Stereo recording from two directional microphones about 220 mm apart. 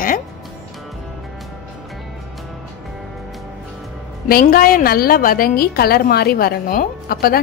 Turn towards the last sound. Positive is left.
turn(degrees=45)  # may be behind; listen again after turning